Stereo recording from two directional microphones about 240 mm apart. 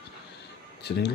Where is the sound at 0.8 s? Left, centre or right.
Left.